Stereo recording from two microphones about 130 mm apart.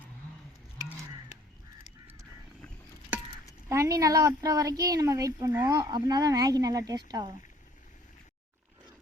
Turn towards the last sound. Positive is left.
turn(degrees=-30)  # may be behind; listen again after turning